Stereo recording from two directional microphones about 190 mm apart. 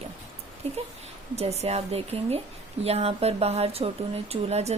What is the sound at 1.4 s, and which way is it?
A woman's voice, 35° right (ahead or behind).